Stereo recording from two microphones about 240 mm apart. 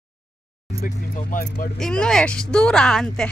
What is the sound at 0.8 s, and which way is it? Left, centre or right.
Keys jangling, left.